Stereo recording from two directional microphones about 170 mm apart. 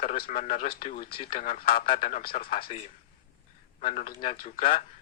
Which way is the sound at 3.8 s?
50° left (ahead or behind).